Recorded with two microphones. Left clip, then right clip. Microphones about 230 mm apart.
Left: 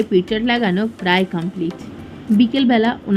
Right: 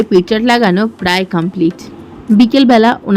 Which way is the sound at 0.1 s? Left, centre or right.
Right.